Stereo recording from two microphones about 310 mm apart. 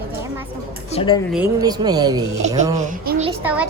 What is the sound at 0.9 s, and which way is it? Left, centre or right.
Speech, centre.